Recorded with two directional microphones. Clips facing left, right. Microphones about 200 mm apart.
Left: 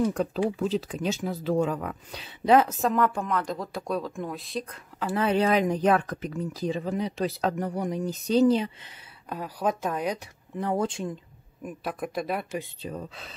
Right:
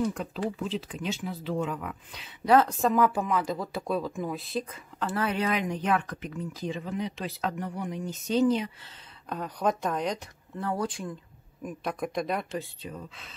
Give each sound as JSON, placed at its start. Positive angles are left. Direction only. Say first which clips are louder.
{"t": 0.6, "sound": "speech", "louder": "left 5 dB", "side_deg": 40}
{"t": 2.4, "sound": "speech", "louder": "left 2 dB", "side_deg": 15}
{"t": 2.7, "sound": "speech", "louder": "right 1 dB", "side_deg": 0}
{"t": 5.1, "sound": "speech", "louder": "left 6 dB", "side_deg": 25}
{"t": 9.3, "sound": "speech", "louder": "even", "side_deg": 5}
{"t": 10.6, "sound": "speech", "louder": "left 4 dB", "side_deg": 20}
{"t": 11.6, "sound": "speech", "louder": "even", "side_deg": 5}
{"t": 12.8, "sound": "speech", "louder": "left 5 dB", "side_deg": 35}